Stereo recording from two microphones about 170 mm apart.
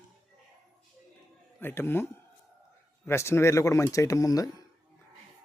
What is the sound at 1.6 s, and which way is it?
Speech, 10° left (ahead or behind).